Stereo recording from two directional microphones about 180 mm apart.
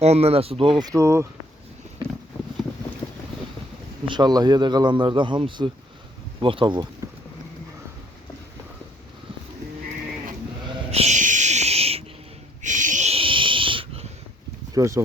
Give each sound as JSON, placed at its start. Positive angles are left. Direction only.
{"t": 0.0, "sound": "a man's voice", "side_deg": -35}
{"t": 4.0, "sound": "a man's voice", "side_deg": -25}
{"t": 10.7, "sound": "sheep", "side_deg": -35}
{"t": 12.6, "sound": "wheeze", "side_deg": -45}
{"t": 14.8, "sound": "speech", "side_deg": -15}